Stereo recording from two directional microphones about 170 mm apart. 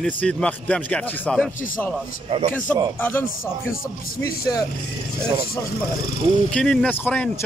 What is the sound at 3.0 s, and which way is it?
Speech, 10° left (ahead or behind).